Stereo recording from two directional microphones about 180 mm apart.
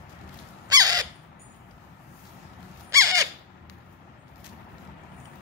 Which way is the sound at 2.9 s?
20° right (ahead or behind).